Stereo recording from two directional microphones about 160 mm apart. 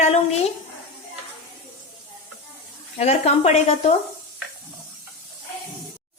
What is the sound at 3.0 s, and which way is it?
Speech, 45° left (ahead or behind).